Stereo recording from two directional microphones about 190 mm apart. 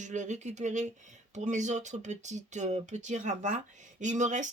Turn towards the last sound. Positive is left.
turn(degrees=-40)  # may be behind; listen again after turning